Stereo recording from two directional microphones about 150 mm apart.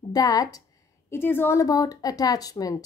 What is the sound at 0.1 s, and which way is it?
Speech, 25° left (ahead or behind).